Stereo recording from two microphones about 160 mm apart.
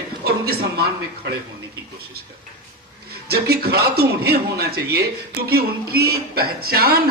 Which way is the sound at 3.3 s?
80° right.